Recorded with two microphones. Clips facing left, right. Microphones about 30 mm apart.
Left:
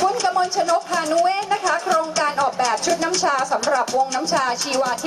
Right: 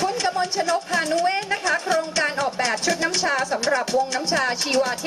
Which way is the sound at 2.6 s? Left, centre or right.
Right.